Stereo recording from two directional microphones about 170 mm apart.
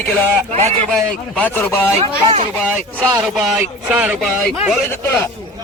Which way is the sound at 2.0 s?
35° right (ahead or behind).